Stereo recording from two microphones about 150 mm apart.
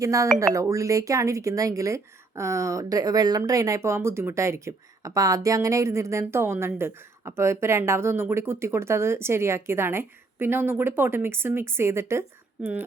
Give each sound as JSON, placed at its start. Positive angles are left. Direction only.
{"t": 0.0, "sound": "speech", "side_deg": -20}
{"t": 12.6, "sound": "speech", "side_deg": -5}